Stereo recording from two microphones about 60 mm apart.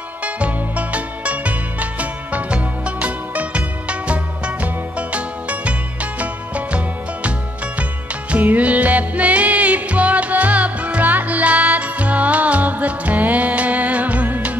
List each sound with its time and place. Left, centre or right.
0.2 s music: right
8.3 s music: right